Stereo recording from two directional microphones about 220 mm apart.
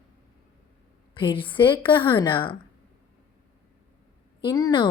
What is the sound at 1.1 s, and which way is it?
A woman's voice, 20° left (ahead or behind).